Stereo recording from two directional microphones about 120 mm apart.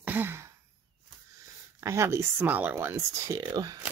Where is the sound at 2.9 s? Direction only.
25° right (ahead or behind).